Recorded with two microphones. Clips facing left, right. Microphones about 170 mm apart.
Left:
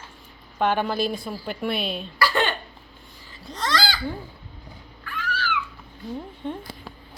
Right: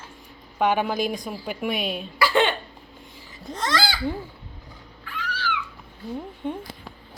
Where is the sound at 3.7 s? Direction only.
10° right (ahead or behind).